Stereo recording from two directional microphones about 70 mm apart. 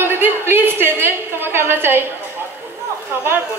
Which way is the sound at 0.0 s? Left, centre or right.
Right.